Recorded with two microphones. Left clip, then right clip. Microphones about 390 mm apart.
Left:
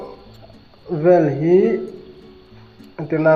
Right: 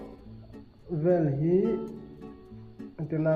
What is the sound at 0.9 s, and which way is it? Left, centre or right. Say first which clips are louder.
Speech: left 12 dB; centre.